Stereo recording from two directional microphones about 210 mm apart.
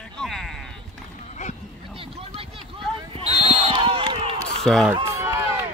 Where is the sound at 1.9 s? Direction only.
25° right (ahead or behind).